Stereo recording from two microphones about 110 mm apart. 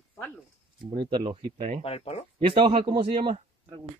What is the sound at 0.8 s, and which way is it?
Speech, 45° right (ahead or behind).